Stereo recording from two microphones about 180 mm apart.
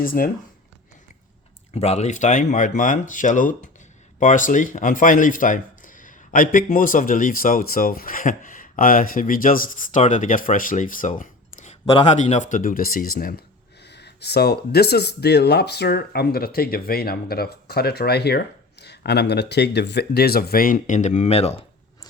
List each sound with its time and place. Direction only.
0.0 s speech: 55° left (ahead or behind)
1.7 s speech: 35° left (ahead or behind); by 13.4 s 55° left (ahead or behind)
13.8 s speech: 70° left (ahead or behind); by 21.6 s 35° left (ahead or behind)